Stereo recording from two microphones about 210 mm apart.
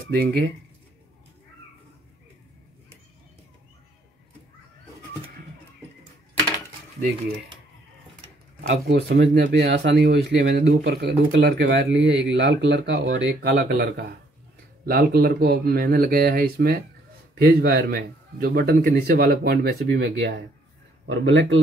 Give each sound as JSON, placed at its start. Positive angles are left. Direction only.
{"t": 8.6, "sound": "speech", "side_deg": -50}
{"t": 10.7, "sound": "speech", "side_deg": -45}